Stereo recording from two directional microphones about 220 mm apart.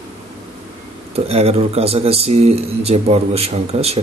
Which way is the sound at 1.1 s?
25° right (ahead or behind).